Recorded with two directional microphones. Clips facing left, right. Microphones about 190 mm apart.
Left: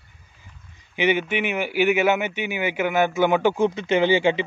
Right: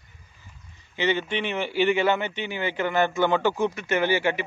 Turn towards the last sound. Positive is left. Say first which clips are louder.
# left 5 dB
turn(degrees=20)  # may be behind; listen again after turning